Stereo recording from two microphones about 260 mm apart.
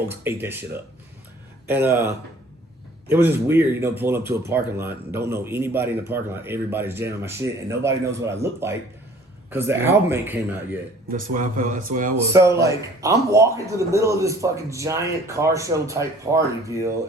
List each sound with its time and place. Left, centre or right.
0.1 s speech: centre
11.1 s speech: right
12.1 s speech: centre